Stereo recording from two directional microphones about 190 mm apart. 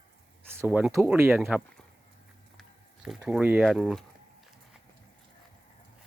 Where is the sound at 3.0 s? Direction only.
5° right (ahead or behind).